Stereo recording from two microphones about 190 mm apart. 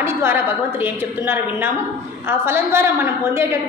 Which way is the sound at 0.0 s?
10° right (ahead or behind).